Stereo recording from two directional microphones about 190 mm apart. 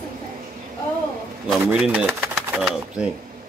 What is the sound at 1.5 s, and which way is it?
Speech, 5° right (ahead or behind).